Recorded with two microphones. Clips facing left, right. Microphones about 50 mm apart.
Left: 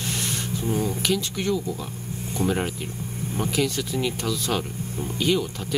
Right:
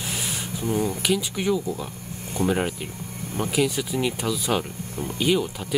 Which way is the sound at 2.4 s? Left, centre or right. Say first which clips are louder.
Right 1 dB; right.